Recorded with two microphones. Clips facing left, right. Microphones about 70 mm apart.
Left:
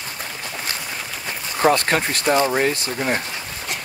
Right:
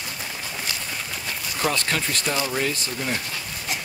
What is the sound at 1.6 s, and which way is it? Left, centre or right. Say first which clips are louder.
Speech: left 8 dB; left.